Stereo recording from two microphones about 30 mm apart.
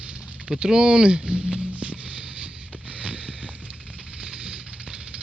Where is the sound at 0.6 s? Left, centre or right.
Right.